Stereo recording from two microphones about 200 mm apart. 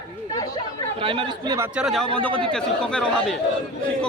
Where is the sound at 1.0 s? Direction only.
25° right (ahead or behind).